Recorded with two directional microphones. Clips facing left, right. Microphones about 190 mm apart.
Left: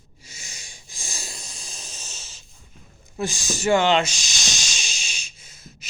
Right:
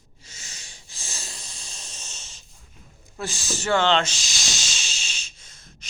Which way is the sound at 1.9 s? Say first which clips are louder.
Left 2 dB; 5° left (ahead or behind).